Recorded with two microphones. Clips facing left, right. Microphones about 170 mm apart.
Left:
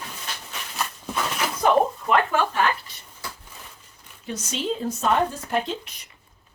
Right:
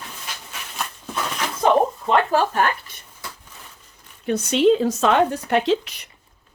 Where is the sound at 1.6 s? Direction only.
25° right (ahead or behind).